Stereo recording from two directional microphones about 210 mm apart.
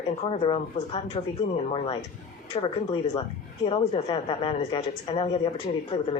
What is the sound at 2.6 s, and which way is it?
Speech, 25° left (ahead or behind).